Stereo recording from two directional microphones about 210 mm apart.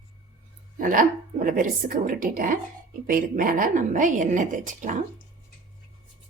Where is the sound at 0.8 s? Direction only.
40° right (ahead or behind).